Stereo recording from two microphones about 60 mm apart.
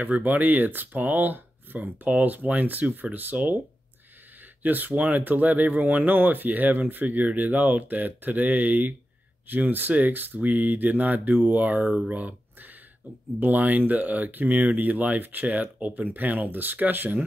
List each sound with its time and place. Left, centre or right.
0.0 s speech: right
4.6 s speech: right